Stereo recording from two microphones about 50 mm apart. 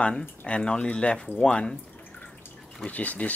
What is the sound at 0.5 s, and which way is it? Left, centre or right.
Speech, centre.